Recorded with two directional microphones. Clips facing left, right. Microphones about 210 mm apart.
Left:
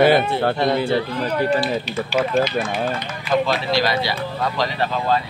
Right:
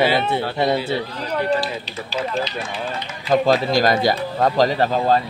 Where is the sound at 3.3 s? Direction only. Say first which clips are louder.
Right 3 dB; 45° right (ahead or behind).